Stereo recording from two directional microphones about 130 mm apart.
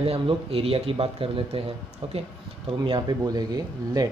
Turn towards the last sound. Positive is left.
turn(degrees=-30)  # may be behind; listen again after turning